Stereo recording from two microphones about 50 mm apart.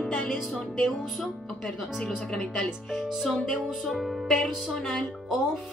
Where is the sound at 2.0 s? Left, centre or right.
Centre.